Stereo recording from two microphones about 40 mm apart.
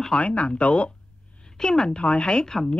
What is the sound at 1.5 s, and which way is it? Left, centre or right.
Speech, centre.